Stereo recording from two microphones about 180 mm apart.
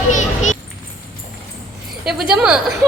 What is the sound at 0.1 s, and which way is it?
Children playing, 45° left (ahead or behind).